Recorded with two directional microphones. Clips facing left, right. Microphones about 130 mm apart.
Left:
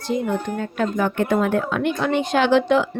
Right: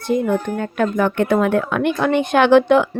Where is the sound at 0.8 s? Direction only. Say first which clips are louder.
Right 4 dB; 60° right (ahead or behind).